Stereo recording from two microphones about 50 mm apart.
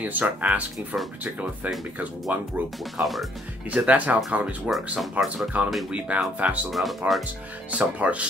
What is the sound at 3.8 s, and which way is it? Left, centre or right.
Speech, right.